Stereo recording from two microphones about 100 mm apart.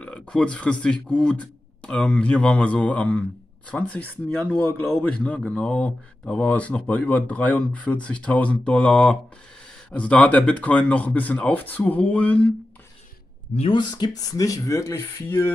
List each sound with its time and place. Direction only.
0.0 s speech: 10° left (ahead or behind)
13.7 s speech: 45° left (ahead or behind); by 15.5 s 25° left (ahead or behind)